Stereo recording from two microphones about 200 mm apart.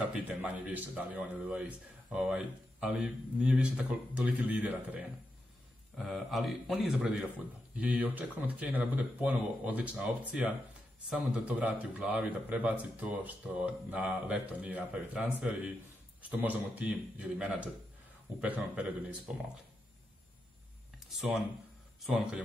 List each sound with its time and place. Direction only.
0.1 s a man's voice: 5° right (ahead or behind)
21.1 s speech: centre (ahead or behind)